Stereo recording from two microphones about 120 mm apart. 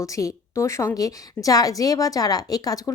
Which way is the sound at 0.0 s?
25° left (ahead or behind).